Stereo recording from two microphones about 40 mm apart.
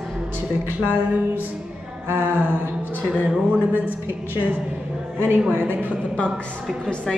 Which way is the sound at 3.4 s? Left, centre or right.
Right.